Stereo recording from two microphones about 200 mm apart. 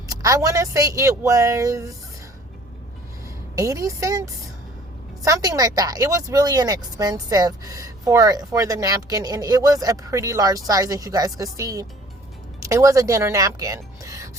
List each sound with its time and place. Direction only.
0.2 s speech: 15° right (ahead or behind)
3.5 s speech: 15° right (ahead or behind)